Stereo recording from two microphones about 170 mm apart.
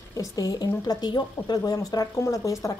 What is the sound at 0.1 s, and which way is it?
A woman's voice, 20° left (ahead or behind).